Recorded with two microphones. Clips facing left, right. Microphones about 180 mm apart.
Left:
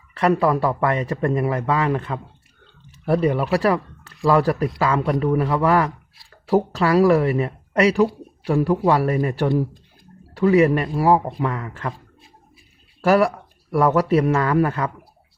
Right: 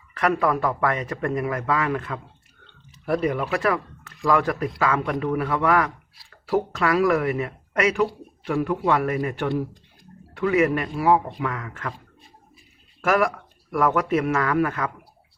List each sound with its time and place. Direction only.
0.1 s a man's voice: 30° left (ahead or behind)
13.0 s speech: 30° left (ahead or behind)